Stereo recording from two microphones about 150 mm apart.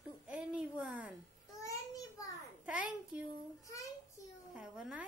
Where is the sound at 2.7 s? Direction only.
10° right (ahead or behind).